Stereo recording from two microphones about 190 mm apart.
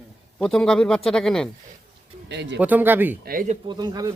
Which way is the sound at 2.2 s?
65° right (ahead or behind).